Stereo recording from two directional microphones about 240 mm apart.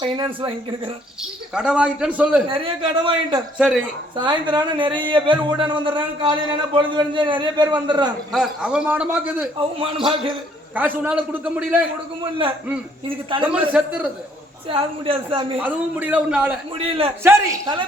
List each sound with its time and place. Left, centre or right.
0.0 s speech: centre
1.5 s speech: centre
2.5 s speech: right
3.6 s speech: centre
4.1 s speech: centre
8.3 s speech: centre
9.8 s speech: right
10.8 s a man's voice: centre
13.4 s speech: centre
14.7 s speech: right
15.6 s a man's voice: centre
16.7 s speech: right
17.2 s a man's voice: centre